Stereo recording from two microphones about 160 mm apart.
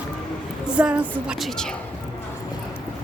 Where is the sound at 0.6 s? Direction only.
5° right (ahead or behind).